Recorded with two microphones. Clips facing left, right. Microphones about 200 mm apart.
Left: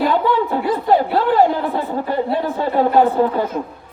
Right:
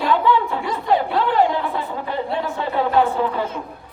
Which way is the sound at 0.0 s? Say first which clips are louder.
Left 2 dB; 45° left (ahead or behind).